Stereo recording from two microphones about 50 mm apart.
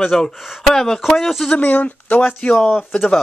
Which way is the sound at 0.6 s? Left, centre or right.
Centre.